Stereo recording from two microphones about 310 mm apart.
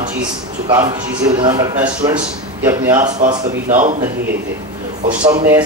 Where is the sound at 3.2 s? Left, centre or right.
Right.